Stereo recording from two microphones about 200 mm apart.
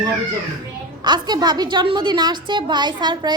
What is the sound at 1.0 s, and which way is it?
A woman's voice, 20° right (ahead or behind).